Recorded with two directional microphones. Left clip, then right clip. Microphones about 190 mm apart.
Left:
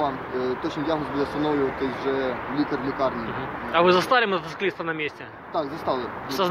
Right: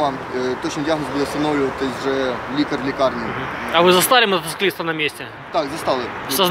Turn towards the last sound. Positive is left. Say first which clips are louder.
# right 6 dB
turn(degrees=-15)  # may be behind; listen again after turning